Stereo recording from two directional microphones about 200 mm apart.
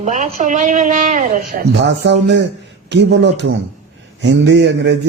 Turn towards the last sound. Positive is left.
turn(degrees=-60)  # may be behind; listen again after turning